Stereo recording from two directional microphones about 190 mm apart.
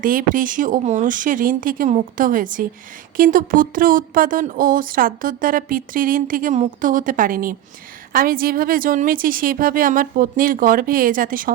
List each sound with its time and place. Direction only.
0.0 s speech: 45° right (ahead or behind)